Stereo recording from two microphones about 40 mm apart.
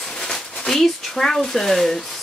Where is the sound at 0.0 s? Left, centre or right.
Centre.